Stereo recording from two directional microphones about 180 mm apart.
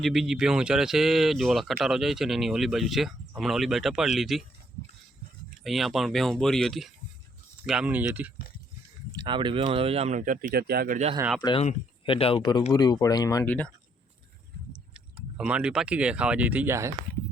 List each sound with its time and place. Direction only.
0.0 s speech: centre (ahead or behind)
5.6 s speech: centre (ahead or behind)
9.1 s speech: 25° right (ahead or behind); by 11.1 s 45° right (ahead or behind)
11.3 s speech: 25° left (ahead or behind)
14.7 s speech: 5° right (ahead or behind)